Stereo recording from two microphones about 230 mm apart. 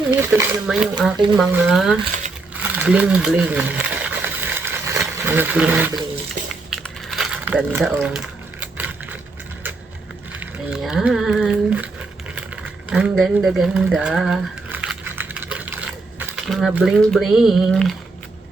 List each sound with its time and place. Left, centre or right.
0.1 s speech: centre
2.6 s a sound: centre
6.7 s crumpling: centre
10.4 s speech: centre
12.9 s a sound: centre
16.1 s speech: centre